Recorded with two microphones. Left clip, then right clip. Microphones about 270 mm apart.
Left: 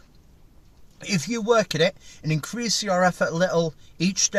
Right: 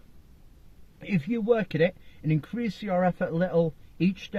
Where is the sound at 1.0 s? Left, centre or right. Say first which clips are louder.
Left 3 dB; left.